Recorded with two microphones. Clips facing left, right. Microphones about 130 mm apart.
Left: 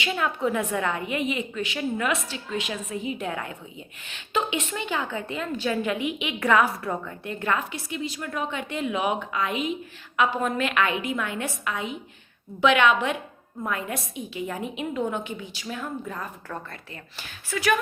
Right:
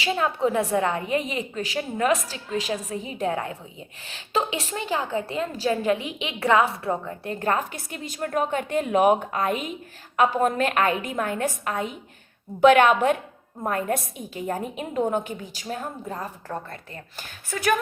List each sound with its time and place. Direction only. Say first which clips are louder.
0.0 s a woman's voice: right 3 dB; 30° right (ahead or behind)